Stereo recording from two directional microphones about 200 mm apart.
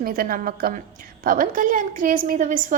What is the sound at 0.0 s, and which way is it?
A woman's voice, 45° right (ahead or behind).